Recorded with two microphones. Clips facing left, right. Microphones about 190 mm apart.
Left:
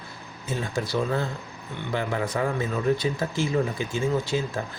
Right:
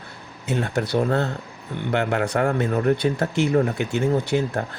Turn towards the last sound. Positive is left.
turn(degrees=-65)  # may be behind; listen again after turning